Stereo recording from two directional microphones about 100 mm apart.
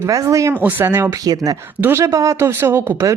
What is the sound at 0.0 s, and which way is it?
Speech, 30° right (ahead or behind).